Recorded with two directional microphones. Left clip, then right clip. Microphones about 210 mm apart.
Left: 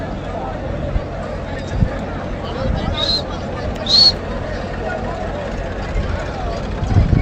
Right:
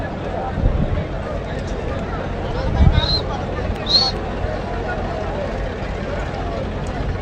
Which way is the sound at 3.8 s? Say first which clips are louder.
Left 6 dB; 35° left (ahead or behind).